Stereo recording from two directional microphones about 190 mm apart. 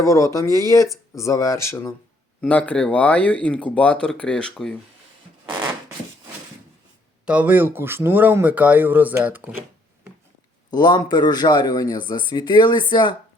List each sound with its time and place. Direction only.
0.0 s speech: 15° left (ahead or behind)
7.3 s speech: 10° right (ahead or behind)
10.7 s speech: 20° left (ahead or behind)